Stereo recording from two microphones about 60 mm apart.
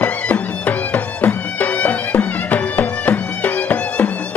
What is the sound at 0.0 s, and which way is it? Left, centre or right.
Music, left.